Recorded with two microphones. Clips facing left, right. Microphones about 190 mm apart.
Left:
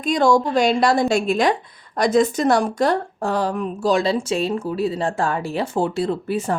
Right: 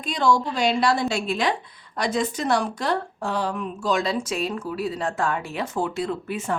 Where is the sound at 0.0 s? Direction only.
45° left (ahead or behind).